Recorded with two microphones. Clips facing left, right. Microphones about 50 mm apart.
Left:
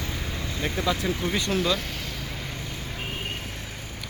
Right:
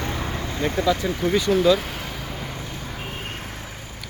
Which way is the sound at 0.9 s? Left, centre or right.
Centre.